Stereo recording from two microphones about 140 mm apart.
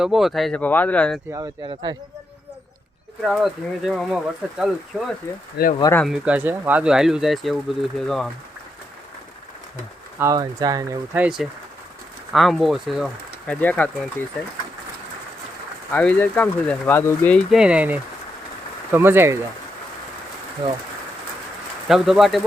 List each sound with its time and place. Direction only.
0.0 s speech: centre (ahead or behind)
0.6 s speech: 10° left (ahead or behind)
1.3 s speech: 30° right (ahead or behind)
3.2 s speech: centre (ahead or behind)
10.2 s speech: 25° right (ahead or behind)
11.1 s speech: 5° right (ahead or behind)
13.5 s speech: 10° left (ahead or behind)
15.9 s speech: 10° left (ahead or behind)
17.3 s speech: 5° right (ahead or behind)
21.8 s speech: centre (ahead or behind)